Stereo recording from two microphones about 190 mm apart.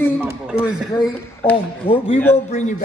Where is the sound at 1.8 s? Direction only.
30° left (ahead or behind).